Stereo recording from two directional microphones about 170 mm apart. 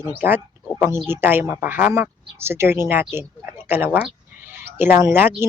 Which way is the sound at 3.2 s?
10° right (ahead or behind).